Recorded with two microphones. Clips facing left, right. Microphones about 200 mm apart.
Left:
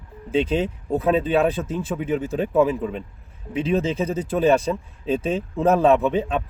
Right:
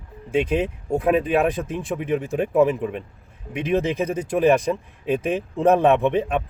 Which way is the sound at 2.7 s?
15° right (ahead or behind).